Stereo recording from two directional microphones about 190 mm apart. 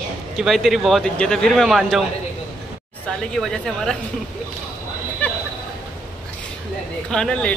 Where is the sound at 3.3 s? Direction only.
Centre (ahead or behind).